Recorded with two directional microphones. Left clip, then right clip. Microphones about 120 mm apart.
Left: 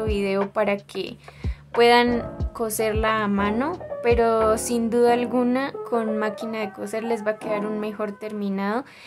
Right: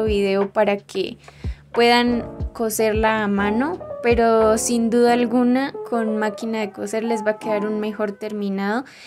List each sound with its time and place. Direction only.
0.0 s speech: 25° right (ahead or behind)
4.0 s speech: 25° right (ahead or behind)